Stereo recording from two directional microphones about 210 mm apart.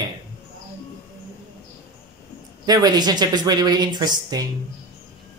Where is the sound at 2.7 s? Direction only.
20° right (ahead or behind).